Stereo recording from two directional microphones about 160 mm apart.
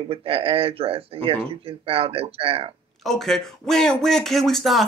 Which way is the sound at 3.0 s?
Centre (ahead or behind).